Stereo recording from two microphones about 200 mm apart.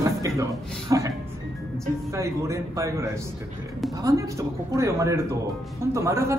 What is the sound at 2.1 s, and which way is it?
A man's voice, 15° right (ahead or behind).